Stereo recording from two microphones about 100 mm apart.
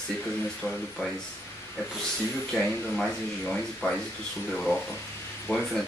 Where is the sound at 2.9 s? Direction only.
5° left (ahead or behind).